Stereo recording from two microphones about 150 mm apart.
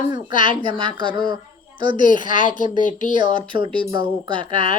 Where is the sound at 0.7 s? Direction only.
30° right (ahead or behind).